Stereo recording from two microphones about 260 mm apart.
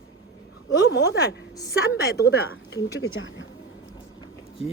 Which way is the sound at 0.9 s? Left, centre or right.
Left.